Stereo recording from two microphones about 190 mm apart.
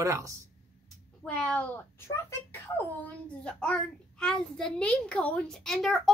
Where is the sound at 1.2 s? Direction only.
5° left (ahead or behind).